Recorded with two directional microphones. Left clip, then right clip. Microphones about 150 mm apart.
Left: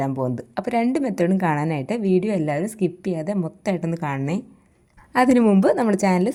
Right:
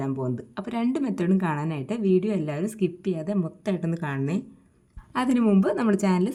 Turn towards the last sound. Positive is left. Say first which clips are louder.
# left 5 dB
turn(degrees=25)  # may be behind; listen again after turning